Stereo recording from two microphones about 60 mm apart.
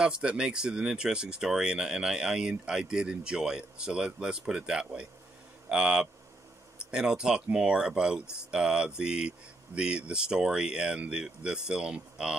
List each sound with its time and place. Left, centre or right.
0.0 s speech: centre